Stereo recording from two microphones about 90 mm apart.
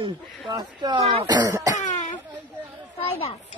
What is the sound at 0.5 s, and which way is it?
A man's voice, 60° right (ahead or behind).